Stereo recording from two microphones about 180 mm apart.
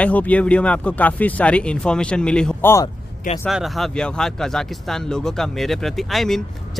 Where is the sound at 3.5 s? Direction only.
Centre (ahead or behind).